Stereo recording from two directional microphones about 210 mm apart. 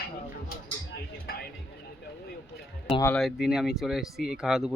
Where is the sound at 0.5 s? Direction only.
45° left (ahead or behind).